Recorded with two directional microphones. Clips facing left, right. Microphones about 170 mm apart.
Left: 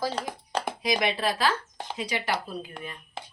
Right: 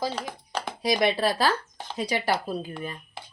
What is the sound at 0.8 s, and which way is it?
Speech, 35° right (ahead or behind).